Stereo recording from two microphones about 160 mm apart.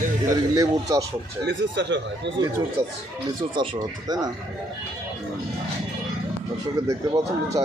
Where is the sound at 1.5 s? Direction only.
90° right.